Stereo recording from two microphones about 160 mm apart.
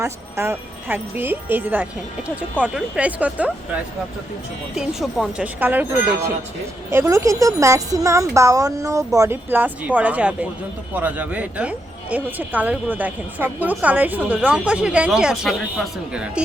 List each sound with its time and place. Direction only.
0.0 s a woman's voice: 15° right (ahead or behind)
4.7 s a woman's voice: 5° right (ahead or behind)
6.9 s a woman's voice: 15° right (ahead or behind)